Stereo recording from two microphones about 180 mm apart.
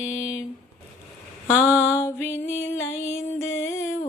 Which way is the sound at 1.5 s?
15° left (ahead or behind).